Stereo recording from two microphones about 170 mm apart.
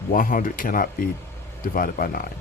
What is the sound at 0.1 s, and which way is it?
Speech, 55° left (ahead or behind).